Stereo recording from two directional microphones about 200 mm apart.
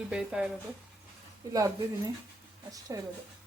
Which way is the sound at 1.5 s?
15° right (ahead or behind).